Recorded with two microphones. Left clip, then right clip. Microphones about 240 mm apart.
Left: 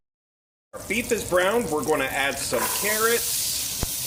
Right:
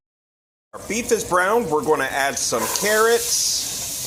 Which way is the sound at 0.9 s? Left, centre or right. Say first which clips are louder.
Right 4 dB; centre.